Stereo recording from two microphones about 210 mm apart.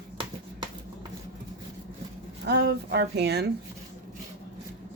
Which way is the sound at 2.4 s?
55° right (ahead or behind).